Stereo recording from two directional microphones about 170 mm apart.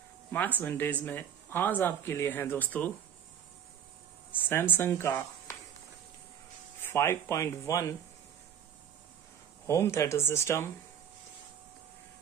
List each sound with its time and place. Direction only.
0.6 s speech: 10° left (ahead or behind)
4.3 s speech: 10° left (ahead or behind)
6.8 s speech: 15° left (ahead or behind)
9.7 s speech: 15° left (ahead or behind)